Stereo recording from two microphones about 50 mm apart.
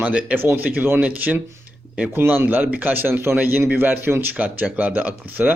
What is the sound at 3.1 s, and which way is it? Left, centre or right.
Speech, right.